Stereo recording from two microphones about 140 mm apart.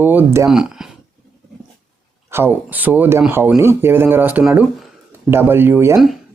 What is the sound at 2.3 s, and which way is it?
Speech, 15° right (ahead or behind).